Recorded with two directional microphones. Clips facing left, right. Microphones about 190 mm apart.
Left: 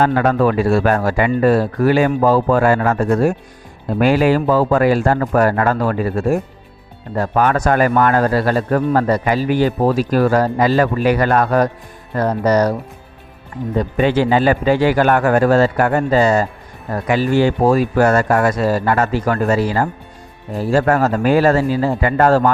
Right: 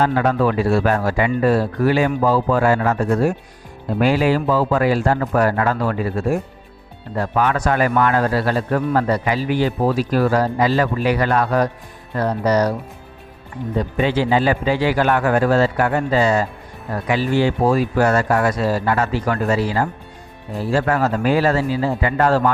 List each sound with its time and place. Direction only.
0.0 s a man's voice: 55° left (ahead or behind)
13.7 s a man's voice: 55° left (ahead or behind)